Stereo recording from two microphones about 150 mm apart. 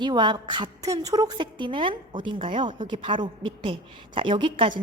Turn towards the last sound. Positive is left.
turn(degrees=-30)  # may be behind; listen again after turning